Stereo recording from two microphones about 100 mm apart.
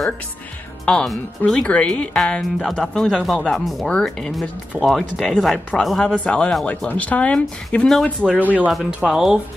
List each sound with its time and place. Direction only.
0.8 s speech: 5° left (ahead or behind)
8.4 s speech: 15° right (ahead or behind)
8.7 s speech: 5° right (ahead or behind)